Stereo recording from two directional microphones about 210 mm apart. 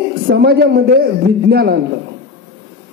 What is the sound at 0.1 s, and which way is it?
A man's voice, 45° right (ahead or behind).